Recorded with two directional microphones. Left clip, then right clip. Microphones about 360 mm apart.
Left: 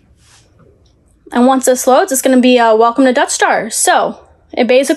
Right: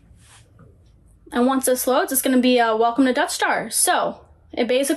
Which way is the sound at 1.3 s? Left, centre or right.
Left.